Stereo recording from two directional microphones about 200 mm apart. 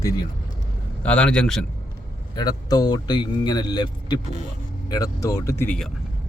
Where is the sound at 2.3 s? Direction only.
20° left (ahead or behind).